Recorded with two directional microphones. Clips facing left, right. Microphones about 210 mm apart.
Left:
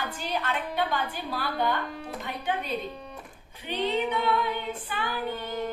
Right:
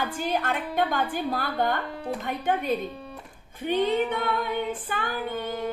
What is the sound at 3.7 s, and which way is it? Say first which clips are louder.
A woman's voice: right 4 dB; 50° right (ahead or behind).